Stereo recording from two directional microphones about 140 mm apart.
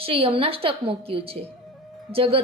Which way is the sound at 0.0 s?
40° right (ahead or behind).